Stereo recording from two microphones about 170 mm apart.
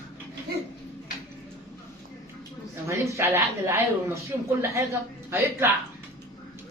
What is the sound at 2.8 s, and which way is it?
A woman's voice, 15° right (ahead or behind).